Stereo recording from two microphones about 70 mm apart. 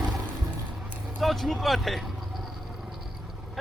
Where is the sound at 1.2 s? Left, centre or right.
Centre.